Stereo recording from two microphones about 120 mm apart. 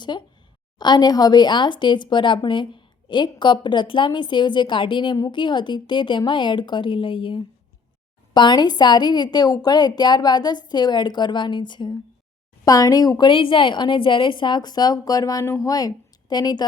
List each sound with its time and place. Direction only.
0.1 s speech: 40° left (ahead or behind)